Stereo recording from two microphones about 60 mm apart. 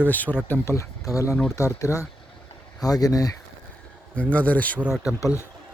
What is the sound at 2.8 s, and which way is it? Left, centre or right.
Speech, left.